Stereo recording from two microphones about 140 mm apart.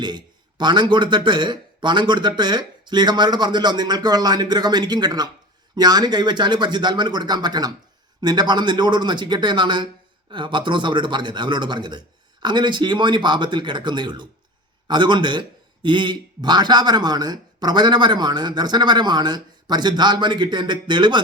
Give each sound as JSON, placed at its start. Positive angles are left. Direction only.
{"t": 0.0, "sound": "a man's voice", "side_deg": -30}